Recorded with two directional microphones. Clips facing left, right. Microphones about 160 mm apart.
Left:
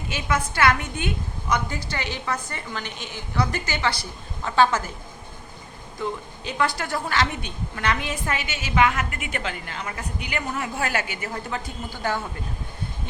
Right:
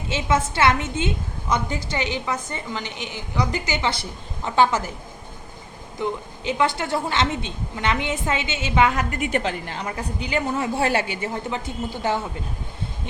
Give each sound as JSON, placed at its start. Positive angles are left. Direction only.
{"t": 0.1, "sound": "a woman's voice", "side_deg": -25}
{"t": 6.0, "sound": "a woman's voice", "side_deg": -20}